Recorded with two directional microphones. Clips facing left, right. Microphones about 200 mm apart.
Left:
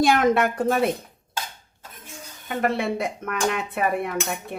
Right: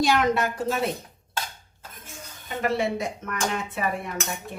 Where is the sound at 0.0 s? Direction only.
55° left (ahead or behind).